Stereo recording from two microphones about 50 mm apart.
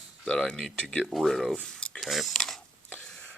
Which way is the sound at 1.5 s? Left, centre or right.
Centre.